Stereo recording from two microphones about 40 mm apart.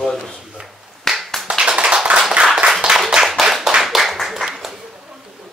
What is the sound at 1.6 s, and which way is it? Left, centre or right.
Clapping, right.